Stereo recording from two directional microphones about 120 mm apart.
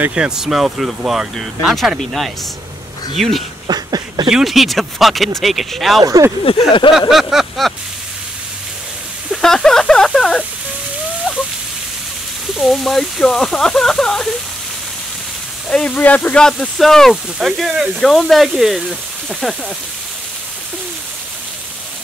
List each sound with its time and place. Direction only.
0.0 s speech: 10° right (ahead or behind)
3.6 s a sound: 35° right (ahead or behind)
4.3 s speech: 5° right (ahead or behind)
6.0 s speech: 30° right (ahead or behind)
6.9 s speech: centre (ahead or behind)
9.3 s a sound: 5° left (ahead or behind)
12.5 s speech: centre (ahead or behind)
15.7 s speech: 10° left (ahead or behind)